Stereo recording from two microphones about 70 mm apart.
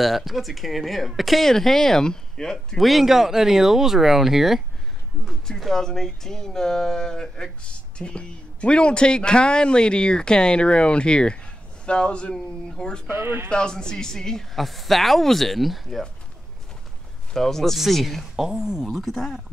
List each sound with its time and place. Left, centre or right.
0.0 s speech: centre
13.1 s speech: right
13.5 s speech: centre
17.3 s speech: centre